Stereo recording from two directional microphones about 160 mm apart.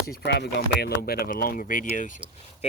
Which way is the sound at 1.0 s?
70° left (ahead or behind).